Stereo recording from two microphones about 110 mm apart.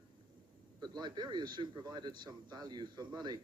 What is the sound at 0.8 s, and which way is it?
Speech, 40° right (ahead or behind).